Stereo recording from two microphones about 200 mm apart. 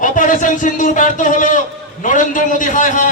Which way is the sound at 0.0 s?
40° left (ahead or behind).